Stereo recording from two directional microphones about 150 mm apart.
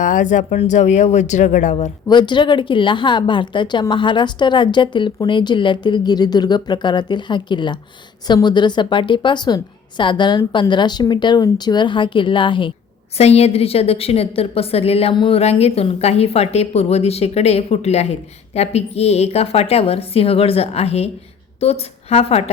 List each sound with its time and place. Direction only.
0.0 s a woman's voice: 55° left (ahead or behind)
2.0 s a woman's voice: 30° left (ahead or behind)
13.1 s a woman's voice: 45° left (ahead or behind)
15.4 s a woman's voice: 45° left (ahead or behind)